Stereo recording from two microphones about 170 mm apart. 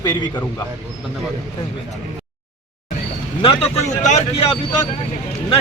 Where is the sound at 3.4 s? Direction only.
40° left (ahead or behind).